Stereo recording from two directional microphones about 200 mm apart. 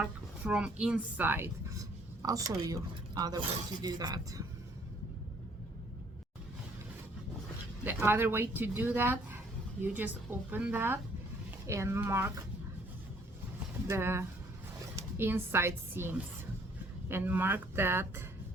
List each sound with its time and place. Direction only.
0.0 s a woman's voice: 5° right (ahead or behind)
7.9 s a woman's voice: 10° right (ahead or behind)
13.8 s a woman's voice: 10° right (ahead or behind)